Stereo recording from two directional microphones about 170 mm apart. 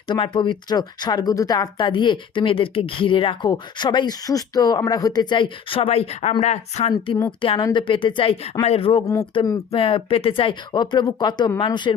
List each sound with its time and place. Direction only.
0.1 s speech: 30° left (ahead or behind)
7.4 s a woman's voice: 30° left (ahead or behind)